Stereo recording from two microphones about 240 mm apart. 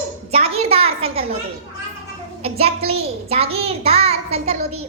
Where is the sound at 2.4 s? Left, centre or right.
Right.